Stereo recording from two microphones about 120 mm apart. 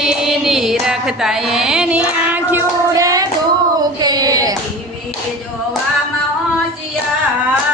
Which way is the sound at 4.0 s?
35° right (ahead or behind).